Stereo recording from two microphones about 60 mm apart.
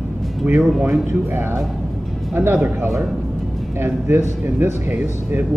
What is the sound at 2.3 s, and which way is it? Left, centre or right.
A man's voice, right.